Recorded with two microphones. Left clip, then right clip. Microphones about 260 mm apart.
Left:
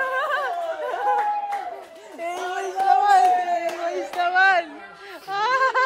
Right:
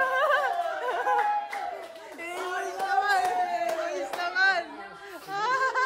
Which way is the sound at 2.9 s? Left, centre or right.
Centre.